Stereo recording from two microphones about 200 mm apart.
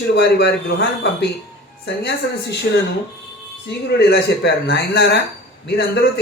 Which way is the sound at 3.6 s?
55° left (ahead or behind).